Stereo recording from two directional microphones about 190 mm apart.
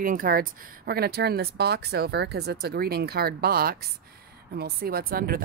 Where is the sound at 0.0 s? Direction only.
45° right (ahead or behind).